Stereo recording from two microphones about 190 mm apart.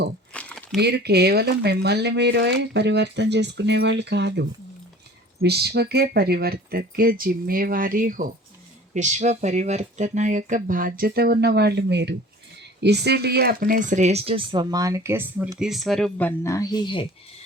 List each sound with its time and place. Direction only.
0.3 s crumpling: 5° left (ahead or behind)
0.8 s speech: 60° right (ahead or behind); by 17.1 s 25° left (ahead or behind)